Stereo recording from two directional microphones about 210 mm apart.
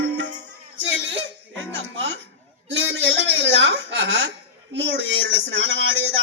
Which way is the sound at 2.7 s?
65° right (ahead or behind).